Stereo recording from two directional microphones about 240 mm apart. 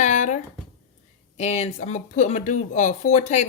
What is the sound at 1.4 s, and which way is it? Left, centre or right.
Speech, left.